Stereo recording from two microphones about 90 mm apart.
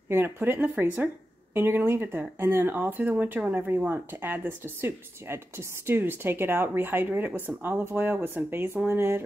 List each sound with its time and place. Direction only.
0.1 s speech: 25° right (ahead or behind)